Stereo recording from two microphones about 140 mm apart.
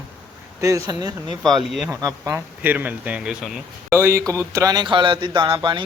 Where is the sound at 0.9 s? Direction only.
30° right (ahead or behind).